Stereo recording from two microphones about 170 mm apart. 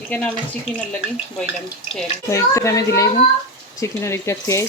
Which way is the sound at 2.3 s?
15° left (ahead or behind).